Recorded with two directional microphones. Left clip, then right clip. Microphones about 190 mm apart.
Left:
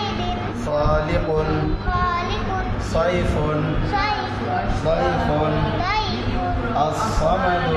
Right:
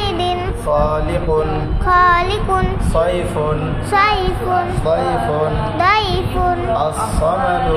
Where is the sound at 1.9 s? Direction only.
55° right (ahead or behind).